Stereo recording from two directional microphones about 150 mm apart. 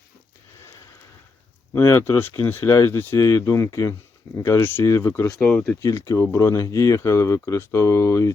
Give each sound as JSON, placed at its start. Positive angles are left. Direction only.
{"t": 1.7, "sound": "speech", "side_deg": 20}
{"t": 5.3, "sound": "speech", "side_deg": 5}
{"t": 5.8, "sound": "speech", "side_deg": 20}